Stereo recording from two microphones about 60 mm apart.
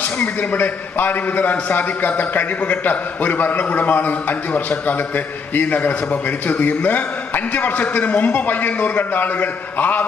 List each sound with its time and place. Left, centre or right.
0.5 s a man's voice: left